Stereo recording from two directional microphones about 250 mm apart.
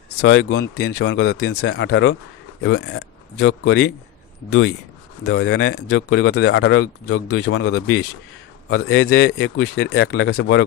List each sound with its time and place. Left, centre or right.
0.2 s a man's voice: left
8.6 s a man's voice: left